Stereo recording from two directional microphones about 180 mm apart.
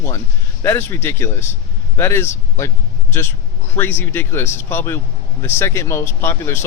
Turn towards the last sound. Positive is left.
turn(degrees=15)  # may be behind; listen again after turning